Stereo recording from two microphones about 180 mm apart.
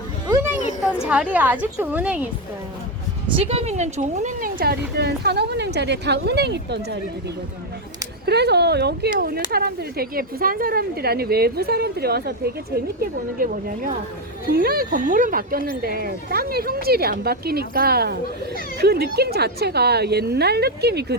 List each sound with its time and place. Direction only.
1.0 s a woman's voice: 10° right (ahead or behind)
3.3 s speech: 35° right (ahead or behind); by 7.0 s 70° right (ahead or behind)
8.3 s a woman's voice: 65° right (ahead or behind)